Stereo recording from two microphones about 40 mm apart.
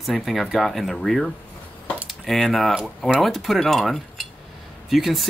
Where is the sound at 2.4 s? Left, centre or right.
Centre.